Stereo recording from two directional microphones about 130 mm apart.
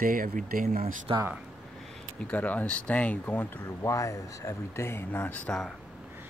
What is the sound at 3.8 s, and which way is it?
Speech, 25° left (ahead or behind).